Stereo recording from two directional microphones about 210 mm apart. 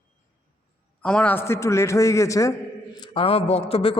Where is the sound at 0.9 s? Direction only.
5° left (ahead or behind).